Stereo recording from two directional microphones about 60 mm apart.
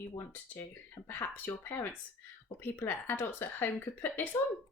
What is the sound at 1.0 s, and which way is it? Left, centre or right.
A woman's voice, left.